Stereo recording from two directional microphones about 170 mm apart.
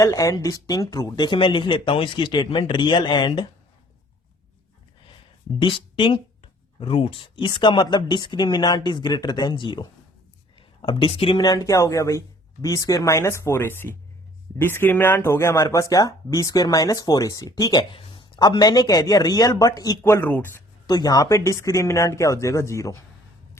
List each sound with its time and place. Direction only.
0.0 s speech: 20° left (ahead or behind)
5.5 s speech: 30° left (ahead or behind)
10.8 s speech: 30° left (ahead or behind); by 20.5 s 10° left (ahead or behind)
20.8 s speech: 25° left (ahead or behind)